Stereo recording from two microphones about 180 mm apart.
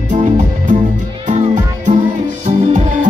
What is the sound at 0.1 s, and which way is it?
Music, 45° right (ahead or behind).